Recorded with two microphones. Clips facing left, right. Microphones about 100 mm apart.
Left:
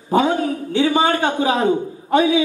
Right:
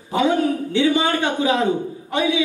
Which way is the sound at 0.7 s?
40° left (ahead or behind).